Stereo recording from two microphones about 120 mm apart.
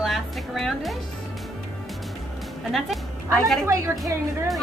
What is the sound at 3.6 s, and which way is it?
Speech, 25° right (ahead or behind).